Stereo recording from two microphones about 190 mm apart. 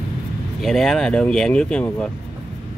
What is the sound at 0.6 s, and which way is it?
Speech, centre (ahead or behind).